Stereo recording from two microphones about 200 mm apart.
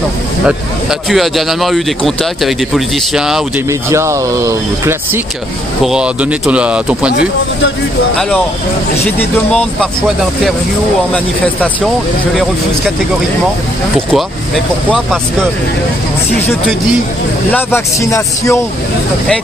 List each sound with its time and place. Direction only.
0.5 s speech: centre (ahead or behind)
3.9 s speech: 15° right (ahead or behind)
9.5 s speech: 5° left (ahead or behind)
14.1 s speech: centre (ahead or behind)
17.5 s speech: 10° left (ahead or behind)